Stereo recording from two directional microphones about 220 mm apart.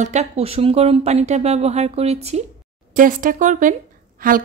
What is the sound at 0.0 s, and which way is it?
Speech, 30° right (ahead or behind).